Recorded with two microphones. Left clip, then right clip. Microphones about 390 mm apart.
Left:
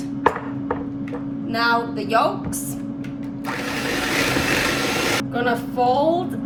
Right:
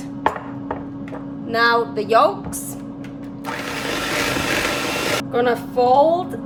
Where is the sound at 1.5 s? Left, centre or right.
Centre.